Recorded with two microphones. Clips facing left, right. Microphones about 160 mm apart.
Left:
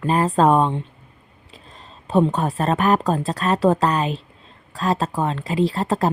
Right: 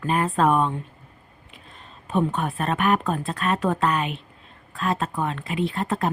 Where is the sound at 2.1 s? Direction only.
35° left (ahead or behind).